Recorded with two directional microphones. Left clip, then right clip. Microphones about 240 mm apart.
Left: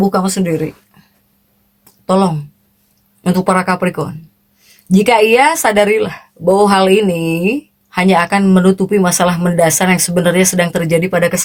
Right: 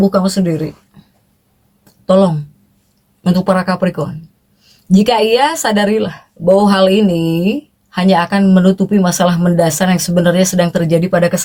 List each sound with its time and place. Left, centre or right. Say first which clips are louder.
0.1 s speech: right 1 dB; left
1.8 s a sound: right 3 dB; left
3.2 s speech: left 1 dB; left